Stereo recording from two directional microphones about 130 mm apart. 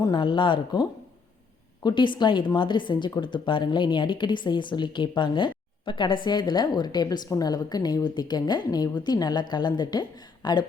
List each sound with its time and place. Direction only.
0.0 s a woman's voice: 35° left (ahead or behind)